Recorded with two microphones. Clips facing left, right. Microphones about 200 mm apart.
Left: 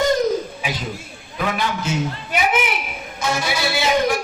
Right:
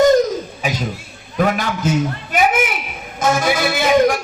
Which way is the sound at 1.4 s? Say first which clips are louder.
Right 5 dB; 45° right (ahead or behind).